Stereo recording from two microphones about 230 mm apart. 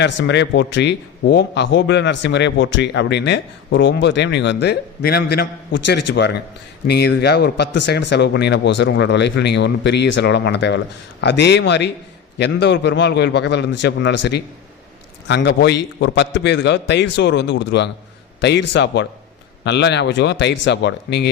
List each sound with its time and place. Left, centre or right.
0.0 s a man's voice: left